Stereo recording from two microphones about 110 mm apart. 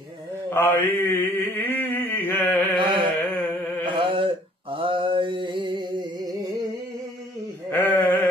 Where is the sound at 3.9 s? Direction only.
50° right (ahead or behind).